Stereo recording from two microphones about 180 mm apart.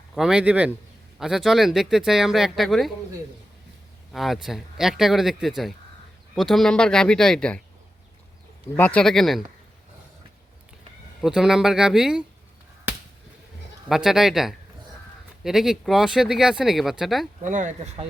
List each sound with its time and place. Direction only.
0.1 s speech: 5° right (ahead or behind)
4.1 s speech: centre (ahead or behind)
8.7 s speech: 10° left (ahead or behind)
11.2 s speech: 5° right (ahead or behind)
13.8 s speech: centre (ahead or behind)
17.4 s speech: 45° right (ahead or behind)